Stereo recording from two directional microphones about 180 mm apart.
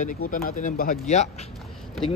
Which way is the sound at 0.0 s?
45° left (ahead or behind).